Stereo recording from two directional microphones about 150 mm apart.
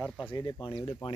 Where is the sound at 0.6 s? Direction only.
35° left (ahead or behind).